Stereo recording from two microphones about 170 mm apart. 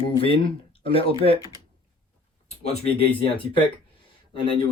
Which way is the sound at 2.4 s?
40° left (ahead or behind).